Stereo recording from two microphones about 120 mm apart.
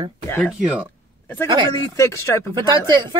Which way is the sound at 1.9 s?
25° left (ahead or behind).